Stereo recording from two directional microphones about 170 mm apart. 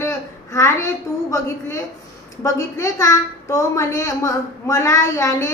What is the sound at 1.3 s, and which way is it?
A woman's voice, 15° left (ahead or behind).